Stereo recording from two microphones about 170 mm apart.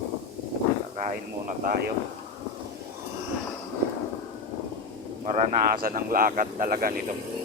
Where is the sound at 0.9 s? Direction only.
45° right (ahead or behind).